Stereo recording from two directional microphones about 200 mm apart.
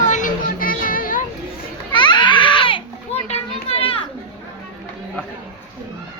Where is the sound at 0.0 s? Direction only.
40° left (ahead or behind).